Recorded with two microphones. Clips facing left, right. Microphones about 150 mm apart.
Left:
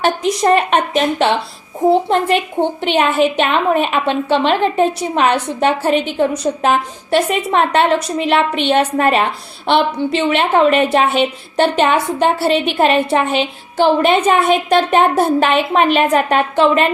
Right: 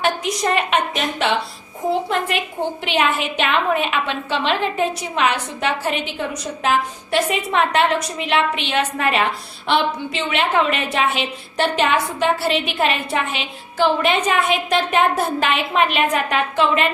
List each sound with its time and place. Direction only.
0.0 s a woman's voice: 40° left (ahead or behind)
10.2 s a woman's voice: 35° left (ahead or behind)